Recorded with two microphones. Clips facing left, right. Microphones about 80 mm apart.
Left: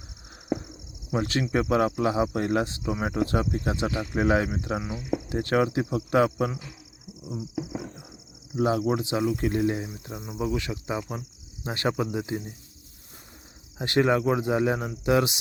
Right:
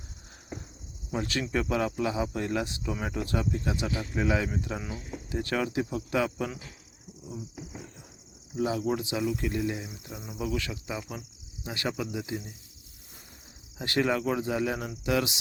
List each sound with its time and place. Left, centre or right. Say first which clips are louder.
1.1 s speech: left 4 dB; left
8.5 s speech: left 5 dB; left
8.8 s speech: left 4 dB; left
13.7 s speech: left 5 dB; left